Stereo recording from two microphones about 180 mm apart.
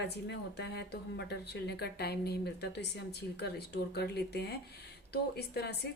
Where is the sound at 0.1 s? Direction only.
70° left (ahead or behind).